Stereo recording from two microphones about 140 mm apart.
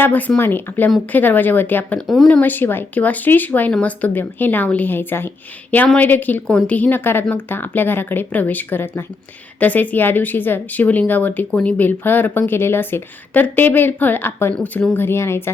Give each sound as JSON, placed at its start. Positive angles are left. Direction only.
{"t": 0.0, "sound": "speech", "side_deg": 10}
{"t": 2.0, "sound": "speech", "side_deg": 0}
{"t": 2.4, "sound": "speech", "side_deg": 15}